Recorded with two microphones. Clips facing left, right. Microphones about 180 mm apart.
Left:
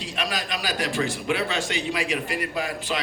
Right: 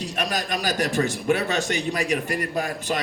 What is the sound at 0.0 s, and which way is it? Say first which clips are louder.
A man's voice: right 3 dB; 45° right (ahead or behind).